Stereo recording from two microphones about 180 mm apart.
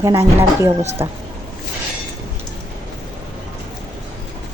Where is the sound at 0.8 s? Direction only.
35° right (ahead or behind).